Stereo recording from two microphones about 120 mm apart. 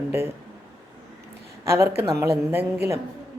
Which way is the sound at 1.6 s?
20° right (ahead or behind).